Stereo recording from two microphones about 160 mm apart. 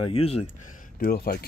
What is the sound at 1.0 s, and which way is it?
Speech, 65° left (ahead or behind).